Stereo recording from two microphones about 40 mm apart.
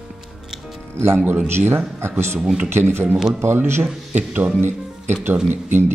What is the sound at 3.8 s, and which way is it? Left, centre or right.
Speech, right.